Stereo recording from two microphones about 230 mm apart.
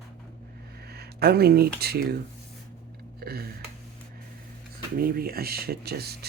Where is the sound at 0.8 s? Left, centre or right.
Right.